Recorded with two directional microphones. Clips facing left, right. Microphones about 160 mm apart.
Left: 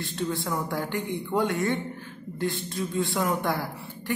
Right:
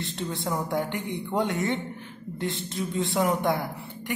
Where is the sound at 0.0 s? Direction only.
20° right (ahead or behind).